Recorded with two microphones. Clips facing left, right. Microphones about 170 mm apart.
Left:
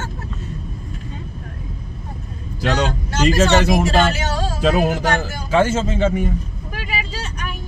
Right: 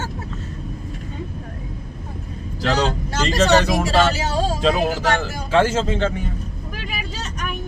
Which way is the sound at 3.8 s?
30° right (ahead or behind).